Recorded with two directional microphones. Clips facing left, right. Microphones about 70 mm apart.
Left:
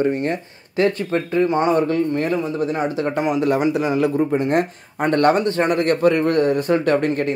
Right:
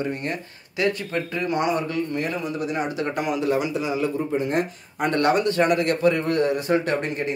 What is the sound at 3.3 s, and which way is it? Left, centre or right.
Speech, left.